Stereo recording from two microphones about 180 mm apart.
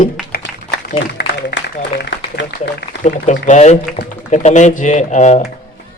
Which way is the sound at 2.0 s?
70° left (ahead or behind).